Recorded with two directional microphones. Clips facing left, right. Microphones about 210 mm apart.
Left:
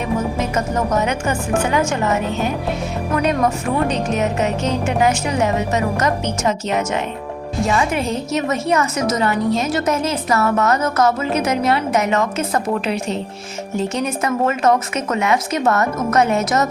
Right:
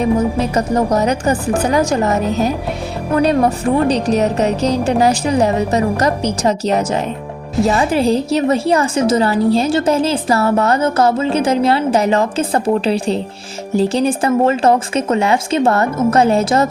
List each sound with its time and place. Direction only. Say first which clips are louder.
0.0 s a woman's voice: right 6 dB; 35° right (ahead or behind)